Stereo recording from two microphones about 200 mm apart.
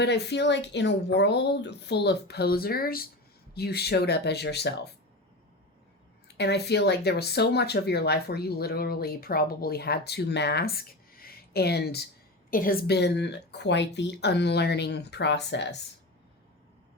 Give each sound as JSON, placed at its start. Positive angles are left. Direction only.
{"t": 0.0, "sound": "speech", "side_deg": 55}
{"t": 6.2, "sound": "speech", "side_deg": 55}